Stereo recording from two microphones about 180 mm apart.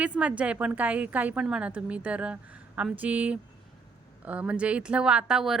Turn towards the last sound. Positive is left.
turn(degrees=-5)  # may be behind; listen again after turning